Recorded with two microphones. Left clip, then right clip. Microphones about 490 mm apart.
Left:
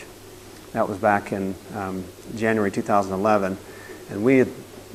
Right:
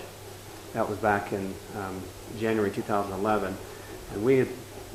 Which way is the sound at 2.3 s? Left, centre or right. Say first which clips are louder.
Left 5 dB; left.